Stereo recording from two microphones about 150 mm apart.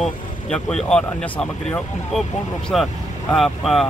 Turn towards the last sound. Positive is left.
turn(degrees=0)  # may be behind; listen again after turning